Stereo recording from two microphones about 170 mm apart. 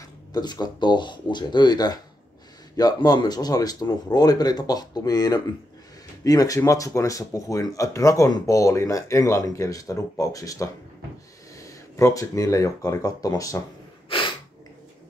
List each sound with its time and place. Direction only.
0.3 s speech: 25° left (ahead or behind)
14.0 s snort: 30° left (ahead or behind)